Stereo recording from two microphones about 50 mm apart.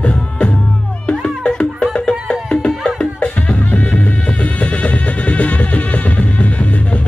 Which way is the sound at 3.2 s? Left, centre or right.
Left.